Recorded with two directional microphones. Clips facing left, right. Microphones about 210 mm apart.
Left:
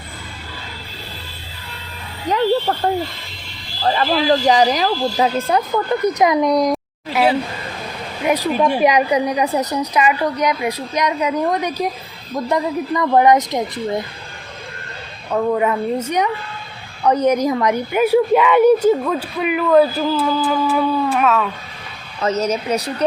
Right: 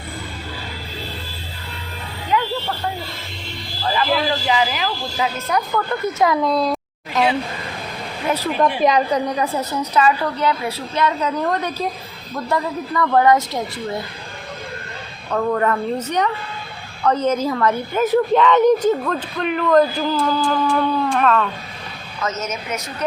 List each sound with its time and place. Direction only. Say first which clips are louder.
2.3 s a sound: left 5 dB; 40° left (ahead or behind)
3.8 s a woman's voice: left 4 dB; 40° left (ahead or behind)
5.7 s a woman's voice: left 4 dB; 15° left (ahead or behind)
8.3 s a woman's voice: left 3 dB; 10° left (ahead or behind)
15.3 s a woman's voice: left 2 dB; 10° left (ahead or behind)
22.2 s a woman's voice: left 7 dB; 35° left (ahead or behind)